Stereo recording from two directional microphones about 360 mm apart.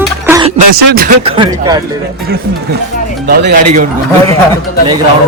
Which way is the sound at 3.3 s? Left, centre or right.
Right.